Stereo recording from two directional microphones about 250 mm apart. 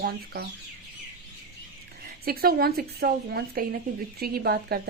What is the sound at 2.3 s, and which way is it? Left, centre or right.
Speech, right.